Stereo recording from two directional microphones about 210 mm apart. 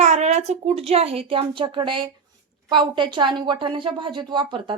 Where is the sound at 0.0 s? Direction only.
30° right (ahead or behind).